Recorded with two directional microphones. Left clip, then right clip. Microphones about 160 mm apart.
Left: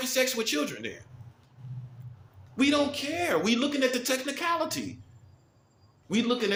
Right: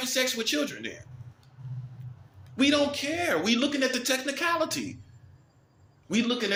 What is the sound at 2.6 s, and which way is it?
Speech, 20° left (ahead or behind).